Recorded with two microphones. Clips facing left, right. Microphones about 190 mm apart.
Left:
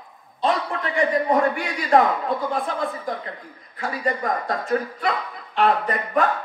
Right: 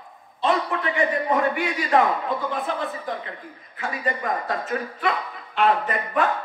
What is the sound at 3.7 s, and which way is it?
Speech, 35° left (ahead or behind).